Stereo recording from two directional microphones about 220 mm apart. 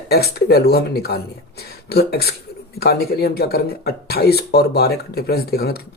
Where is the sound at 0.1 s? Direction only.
45° left (ahead or behind).